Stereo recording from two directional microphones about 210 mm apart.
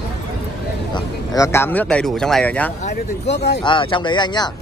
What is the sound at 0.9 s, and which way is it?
Speech, 15° left (ahead or behind).